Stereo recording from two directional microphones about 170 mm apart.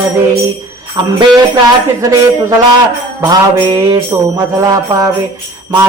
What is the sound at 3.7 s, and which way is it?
Music, 20° right (ahead or behind).